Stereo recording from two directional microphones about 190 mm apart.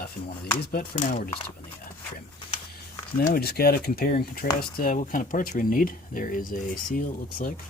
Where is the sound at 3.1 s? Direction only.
50° left (ahead or behind).